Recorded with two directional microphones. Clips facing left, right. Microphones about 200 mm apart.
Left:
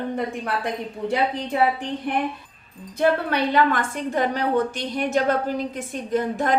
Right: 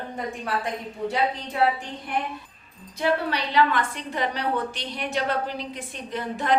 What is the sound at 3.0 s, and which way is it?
A woman's voice, 50° left (ahead or behind).